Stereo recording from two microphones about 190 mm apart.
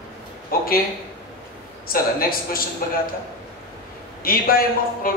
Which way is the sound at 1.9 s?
50° left (ahead or behind).